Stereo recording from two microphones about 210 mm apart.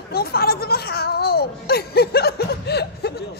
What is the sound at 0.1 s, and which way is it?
Speech, 45° left (ahead or behind).